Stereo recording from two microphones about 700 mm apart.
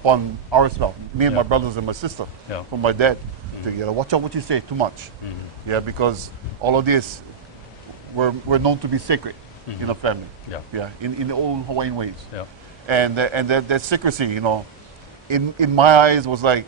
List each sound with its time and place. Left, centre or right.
0.0 s a man's voice: right
2.5 s a man's voice: left
2.8 s a man's voice: right
8.2 s a man's voice: right
10.7 s a man's voice: right
12.3 s a man's voice: left
12.8 s a man's voice: right